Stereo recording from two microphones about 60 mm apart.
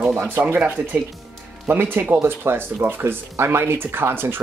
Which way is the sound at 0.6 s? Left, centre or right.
Right.